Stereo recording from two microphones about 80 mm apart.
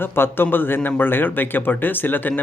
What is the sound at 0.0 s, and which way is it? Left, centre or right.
Speech, left.